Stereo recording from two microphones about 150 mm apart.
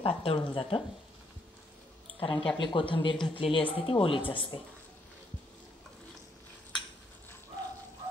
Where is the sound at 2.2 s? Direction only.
35° left (ahead or behind).